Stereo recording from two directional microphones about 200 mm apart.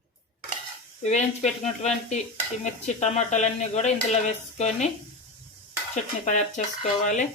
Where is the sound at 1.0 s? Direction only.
35° left (ahead or behind).